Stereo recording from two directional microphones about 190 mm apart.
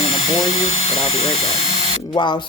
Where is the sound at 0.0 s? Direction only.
30° left (ahead or behind).